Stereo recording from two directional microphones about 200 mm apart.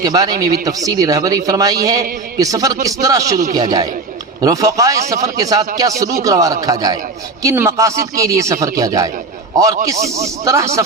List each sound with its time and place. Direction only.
0.0 s a man's voice: 20° right (ahead or behind)
10.4 s speech: 15° right (ahead or behind)